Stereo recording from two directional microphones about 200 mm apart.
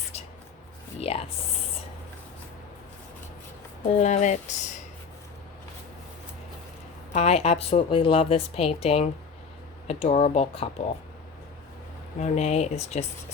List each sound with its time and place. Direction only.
0.9 s speech: 30° left (ahead or behind)
3.8 s speech: 30° left (ahead or behind)
7.1 s a woman's voice: 35° left (ahead or behind)
12.2 s speech: 35° left (ahead or behind)